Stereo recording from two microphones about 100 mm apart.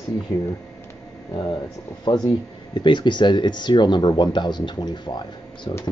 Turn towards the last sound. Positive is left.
turn(degrees=45)  # may be behind; listen again after turning